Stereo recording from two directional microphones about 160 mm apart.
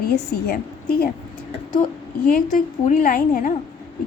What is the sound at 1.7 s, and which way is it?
Speech, 55° left (ahead or behind).